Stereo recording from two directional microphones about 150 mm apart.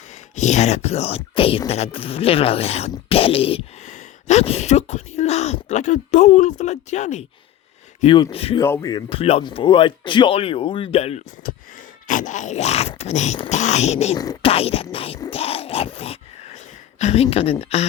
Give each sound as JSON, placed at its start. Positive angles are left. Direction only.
{"t": 0.3, "sound": "speech", "side_deg": 50}
{"t": 8.0, "sound": "speech", "side_deg": 35}
{"t": 8.5, "sound": "speech", "side_deg": 20}
{"t": 8.9, "sound": "speech", "side_deg": 35}
{"t": 11.4, "sound": "wheeze", "side_deg": 70}
{"t": 12.0, "sound": "speech", "side_deg": 60}
{"t": 15.3, "sound": "a sound", "side_deg": 40}
{"t": 17.0, "sound": "speech", "side_deg": 45}